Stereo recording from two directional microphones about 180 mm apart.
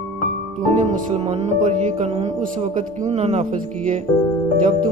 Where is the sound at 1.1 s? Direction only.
35° right (ahead or behind).